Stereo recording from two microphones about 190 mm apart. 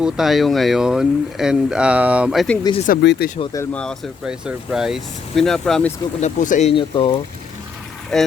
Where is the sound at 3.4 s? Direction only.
15° left (ahead or behind).